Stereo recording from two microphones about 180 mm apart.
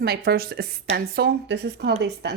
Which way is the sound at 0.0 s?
60° right (ahead or behind).